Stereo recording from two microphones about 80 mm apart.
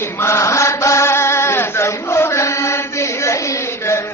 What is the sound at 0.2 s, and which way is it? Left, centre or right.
Chant, left.